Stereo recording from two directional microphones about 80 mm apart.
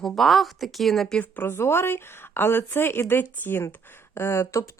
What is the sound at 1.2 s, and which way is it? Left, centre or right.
Speech, left.